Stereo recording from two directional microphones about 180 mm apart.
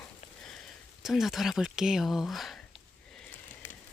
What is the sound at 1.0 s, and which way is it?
Speech, centre (ahead or behind).